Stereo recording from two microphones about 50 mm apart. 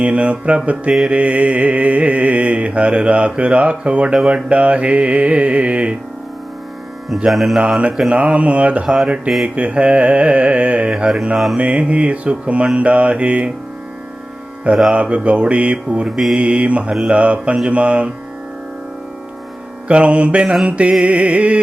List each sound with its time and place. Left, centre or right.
0.0 s mantra: right
4.1 s speech: centre
4.4 s mantra: right
7.3 s speech: centre
8.1 s mantra: right
8.9 s speech: centre
9.6 s mantra: right
14.9 s mantra: right
16.0 s speech: centre
16.3 s mantra: right
19.9 s mantra: right